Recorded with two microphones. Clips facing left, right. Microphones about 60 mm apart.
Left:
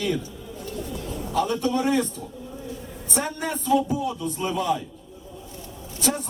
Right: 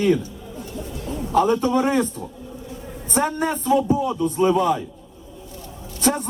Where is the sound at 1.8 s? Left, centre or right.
Right.